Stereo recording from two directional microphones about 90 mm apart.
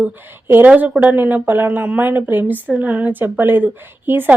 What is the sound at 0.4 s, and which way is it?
Speech, 25° right (ahead or behind).